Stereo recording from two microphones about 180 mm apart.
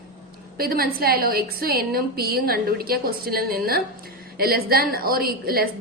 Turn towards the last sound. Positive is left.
turn(degrees=-55)  # may be behind; listen again after turning